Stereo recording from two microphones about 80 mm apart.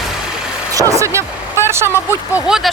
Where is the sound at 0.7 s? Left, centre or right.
Right.